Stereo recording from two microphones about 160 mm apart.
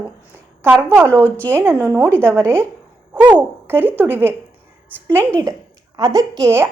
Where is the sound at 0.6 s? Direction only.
15° right (ahead or behind).